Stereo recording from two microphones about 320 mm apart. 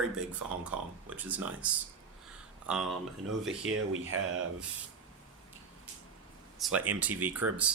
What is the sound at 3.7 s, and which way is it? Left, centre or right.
Speech, right.